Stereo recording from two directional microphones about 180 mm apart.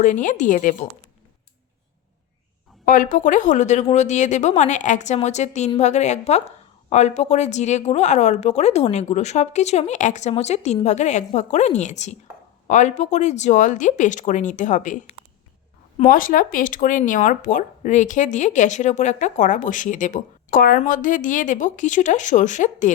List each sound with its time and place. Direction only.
0.0 s speech: 45° left (ahead or behind)
2.8 s speech: 50° left (ahead or behind)
16.0 s speech: 50° left (ahead or behind)